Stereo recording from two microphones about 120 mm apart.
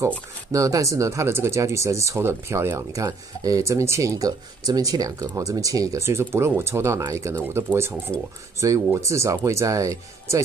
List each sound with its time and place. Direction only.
0.5 s speech: 30° right (ahead or behind)
8.1 s speech: 10° left (ahead or behind)
8.5 s speech: 25° right (ahead or behind)